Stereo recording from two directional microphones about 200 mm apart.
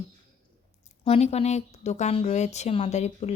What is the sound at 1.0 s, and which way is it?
A woman's voice, 30° left (ahead or behind).